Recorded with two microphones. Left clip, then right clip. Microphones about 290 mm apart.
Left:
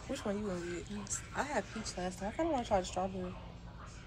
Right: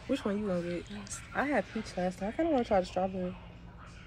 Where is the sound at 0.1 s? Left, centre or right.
Right.